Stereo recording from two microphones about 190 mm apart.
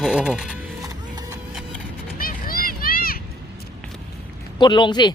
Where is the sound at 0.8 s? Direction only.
20° right (ahead or behind).